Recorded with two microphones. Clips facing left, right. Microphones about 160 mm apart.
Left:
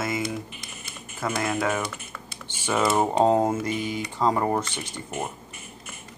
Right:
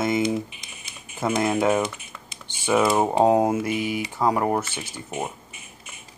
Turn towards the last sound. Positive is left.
turn(degrees=-5)  # may be behind; listen again after turning